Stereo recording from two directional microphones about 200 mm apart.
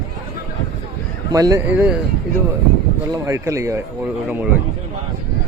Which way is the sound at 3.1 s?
15° right (ahead or behind).